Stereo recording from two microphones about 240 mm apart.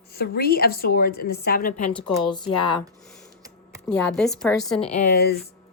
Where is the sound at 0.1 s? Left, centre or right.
Left.